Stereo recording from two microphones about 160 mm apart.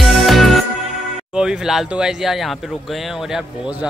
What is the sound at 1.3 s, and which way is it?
Speech, 5° right (ahead or behind).